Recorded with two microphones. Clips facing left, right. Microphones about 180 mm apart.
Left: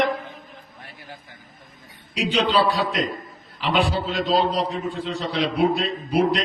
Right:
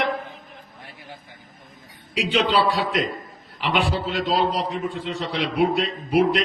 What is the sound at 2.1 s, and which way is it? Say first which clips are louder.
Speech: even; 40° left (ahead or behind).